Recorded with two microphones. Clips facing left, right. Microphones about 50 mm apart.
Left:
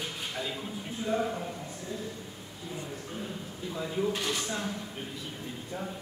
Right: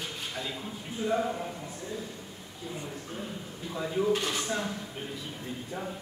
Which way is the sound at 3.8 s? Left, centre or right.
Centre.